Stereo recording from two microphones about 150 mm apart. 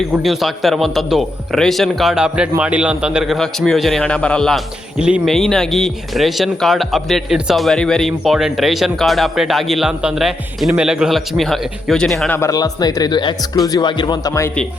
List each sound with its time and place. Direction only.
0.0 s a man's voice: centre (ahead or behind)
12.3 s speech: 20° left (ahead or behind)